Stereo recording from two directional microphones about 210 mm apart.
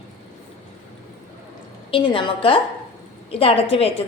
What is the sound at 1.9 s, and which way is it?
A woman's voice, 25° left (ahead or behind).